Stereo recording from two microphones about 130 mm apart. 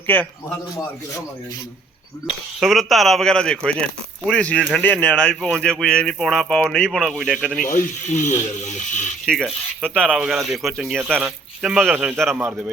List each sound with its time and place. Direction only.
0.1 s speech: 15° left (ahead or behind)
2.6 s speech: centre (ahead or behind)
7.6 s speech: 85° left; by 9.1 s 65° left (ahead or behind)
9.2 s speech: 5° left (ahead or behind)
10.2 s speech: 5° right (ahead or behind)